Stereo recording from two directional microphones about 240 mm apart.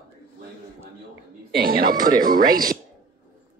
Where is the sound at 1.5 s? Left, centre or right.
Right.